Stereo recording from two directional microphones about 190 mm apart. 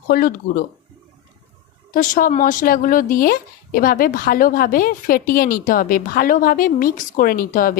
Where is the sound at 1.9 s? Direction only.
45° left (ahead or behind).